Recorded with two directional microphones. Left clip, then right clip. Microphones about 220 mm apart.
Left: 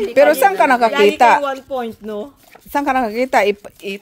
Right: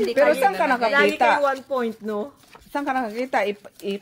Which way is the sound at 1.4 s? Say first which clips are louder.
Left 1 dB; 30° left (ahead or behind).